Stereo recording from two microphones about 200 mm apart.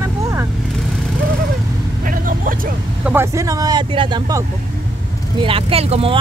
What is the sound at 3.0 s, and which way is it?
Vehicle, 10° right (ahead or behind).